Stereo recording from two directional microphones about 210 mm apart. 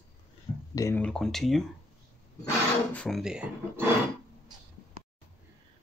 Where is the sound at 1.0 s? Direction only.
5° left (ahead or behind).